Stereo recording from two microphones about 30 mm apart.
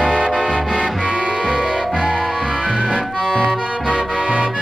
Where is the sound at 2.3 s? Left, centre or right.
Right.